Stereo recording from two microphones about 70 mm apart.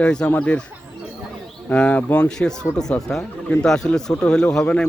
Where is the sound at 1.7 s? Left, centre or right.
Centre.